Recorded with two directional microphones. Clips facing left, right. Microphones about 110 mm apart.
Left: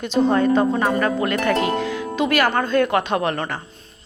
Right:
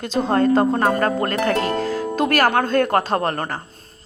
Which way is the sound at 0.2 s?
50° right (ahead or behind).